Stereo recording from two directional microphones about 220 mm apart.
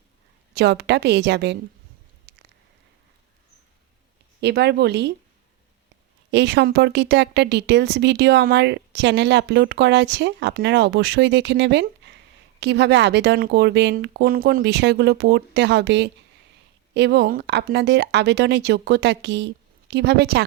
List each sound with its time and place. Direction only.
0.5 s a woman's voice: 50° right (ahead or behind)
2.3 s a sound: 50° right (ahead or behind)
4.4 s a woman's voice: 50° right (ahead or behind)
6.3 s a woman's voice: 50° right (ahead or behind)